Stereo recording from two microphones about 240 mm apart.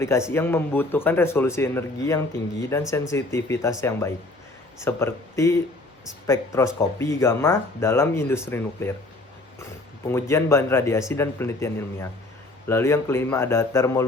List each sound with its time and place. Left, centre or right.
0.0 s speech: centre
10.1 s speech: centre